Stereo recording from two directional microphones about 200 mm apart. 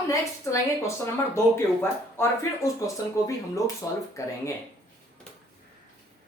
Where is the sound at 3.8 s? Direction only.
15° left (ahead or behind).